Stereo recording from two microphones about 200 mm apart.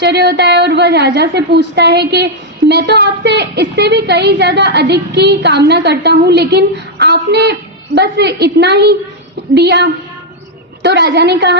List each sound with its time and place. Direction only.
0.0 s a woman's voice: 55° right (ahead or behind)